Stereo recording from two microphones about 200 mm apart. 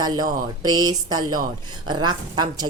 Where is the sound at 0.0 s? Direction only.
20° right (ahead or behind).